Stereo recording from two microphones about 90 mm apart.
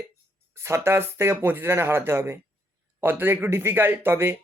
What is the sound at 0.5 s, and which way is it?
Speech, 30° right (ahead or behind).